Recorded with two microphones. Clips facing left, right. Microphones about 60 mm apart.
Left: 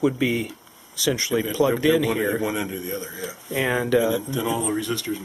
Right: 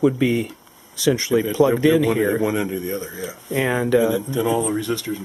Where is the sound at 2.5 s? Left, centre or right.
Right.